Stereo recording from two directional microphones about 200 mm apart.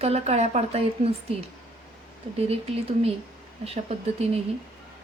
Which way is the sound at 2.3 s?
30° right (ahead or behind).